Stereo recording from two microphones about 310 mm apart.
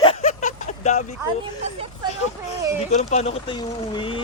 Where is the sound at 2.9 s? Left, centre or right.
Left.